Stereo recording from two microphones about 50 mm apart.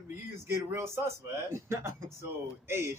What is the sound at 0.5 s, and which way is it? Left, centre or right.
A man's voice, right.